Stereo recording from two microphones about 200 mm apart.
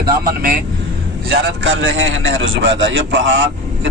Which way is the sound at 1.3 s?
60° right (ahead or behind).